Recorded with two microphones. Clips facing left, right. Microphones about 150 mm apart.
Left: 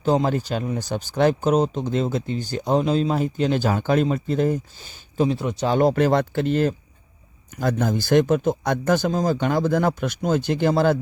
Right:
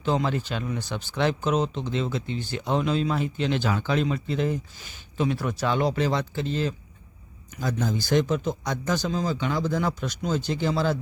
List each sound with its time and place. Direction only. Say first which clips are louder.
0.0 s speech: left 5 dB; 40° left (ahead or behind)
4.8 s speech: left 5 dB; 35° left (ahead or behind)
5.4 s speech: left 3 dB; 25° left (ahead or behind)
5.6 s speech: left 6 dB; 45° left (ahead or behind)